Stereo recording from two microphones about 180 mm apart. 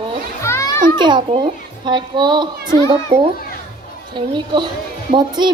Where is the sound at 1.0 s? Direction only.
25° right (ahead or behind).